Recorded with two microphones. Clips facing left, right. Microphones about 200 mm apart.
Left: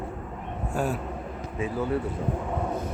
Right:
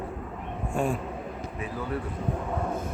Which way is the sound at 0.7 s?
5° left (ahead or behind).